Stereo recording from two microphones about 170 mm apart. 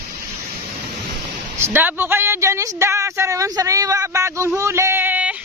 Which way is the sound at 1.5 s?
15° right (ahead or behind).